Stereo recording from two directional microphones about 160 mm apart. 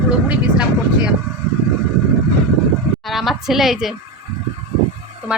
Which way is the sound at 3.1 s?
Centre (ahead or behind).